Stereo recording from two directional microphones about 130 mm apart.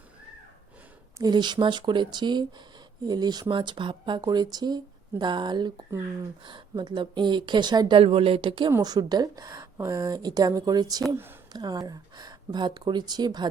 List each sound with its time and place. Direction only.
1.2 s a woman's voice: 35° right (ahead or behind)
11.1 s speech: 15° right (ahead or behind)
11.5 s speech: 30° right (ahead or behind)